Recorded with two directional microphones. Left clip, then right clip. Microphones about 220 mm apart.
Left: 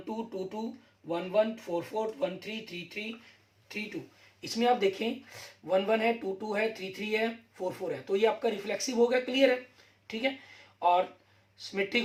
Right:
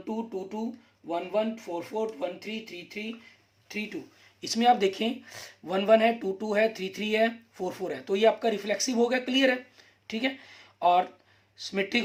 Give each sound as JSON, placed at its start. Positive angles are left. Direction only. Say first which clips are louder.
{"t": 1.0, "sound": "speech", "louder": "even", "side_deg": -50}